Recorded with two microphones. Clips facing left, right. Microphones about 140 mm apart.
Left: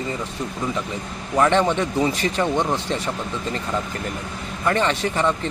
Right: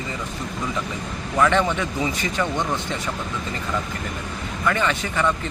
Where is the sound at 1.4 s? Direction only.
30° left (ahead or behind).